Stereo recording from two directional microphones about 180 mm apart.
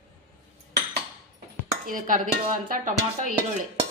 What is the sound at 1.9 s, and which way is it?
Dishes, 50° right (ahead or behind).